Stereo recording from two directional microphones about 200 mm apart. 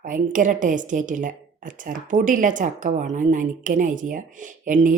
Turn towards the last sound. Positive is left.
turn(degrees=-40)  # may be behind; listen again after turning